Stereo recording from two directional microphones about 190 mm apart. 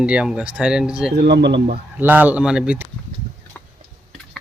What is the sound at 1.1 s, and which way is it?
Speech, 60° right (ahead or behind).